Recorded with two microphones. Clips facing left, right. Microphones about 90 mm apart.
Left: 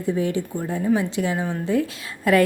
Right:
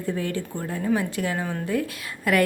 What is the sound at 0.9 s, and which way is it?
A woman's voice, 20° left (ahead or behind).